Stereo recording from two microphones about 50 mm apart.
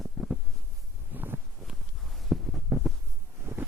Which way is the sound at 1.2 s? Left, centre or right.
Right.